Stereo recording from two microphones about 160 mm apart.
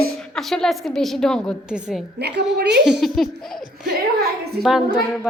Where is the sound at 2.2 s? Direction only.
90° right.